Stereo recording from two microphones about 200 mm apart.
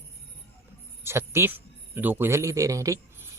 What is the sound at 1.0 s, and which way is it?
Speech, 10° right (ahead or behind).